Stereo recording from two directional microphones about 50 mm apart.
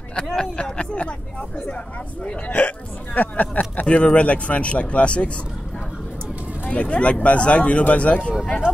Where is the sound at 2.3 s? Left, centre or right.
Left.